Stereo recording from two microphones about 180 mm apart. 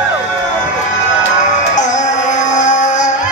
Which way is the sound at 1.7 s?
40° left (ahead or behind).